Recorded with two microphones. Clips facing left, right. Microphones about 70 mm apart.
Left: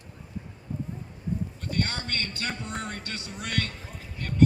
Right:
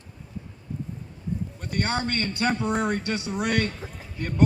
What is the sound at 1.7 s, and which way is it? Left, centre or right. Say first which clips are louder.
A man's voice: right 5 dB; right.